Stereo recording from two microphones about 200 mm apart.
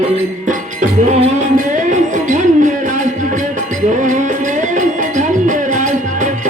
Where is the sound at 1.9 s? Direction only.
40° right (ahead or behind).